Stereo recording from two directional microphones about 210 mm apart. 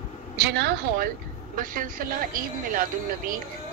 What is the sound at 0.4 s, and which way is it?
A woman's voice, 50° right (ahead or behind).